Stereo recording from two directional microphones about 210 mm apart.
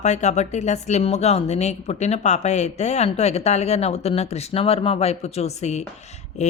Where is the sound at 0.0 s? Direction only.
35° left (ahead or behind).